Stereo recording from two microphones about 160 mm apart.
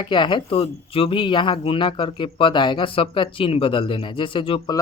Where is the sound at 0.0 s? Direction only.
30° left (ahead or behind).